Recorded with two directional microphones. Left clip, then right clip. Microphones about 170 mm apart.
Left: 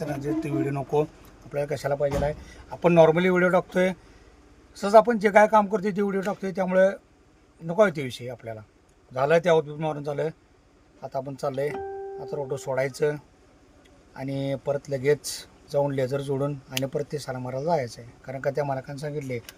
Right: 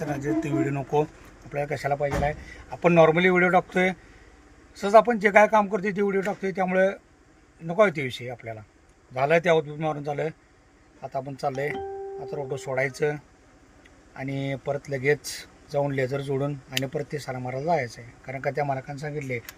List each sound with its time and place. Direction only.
0.0 s speech: 5° right (ahead or behind)
1.5 s speech: 15° left (ahead or behind)